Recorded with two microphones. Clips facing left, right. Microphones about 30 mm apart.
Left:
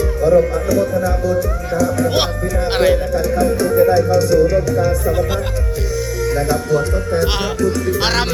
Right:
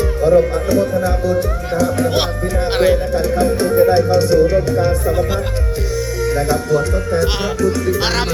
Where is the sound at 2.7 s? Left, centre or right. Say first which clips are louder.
Even; centre.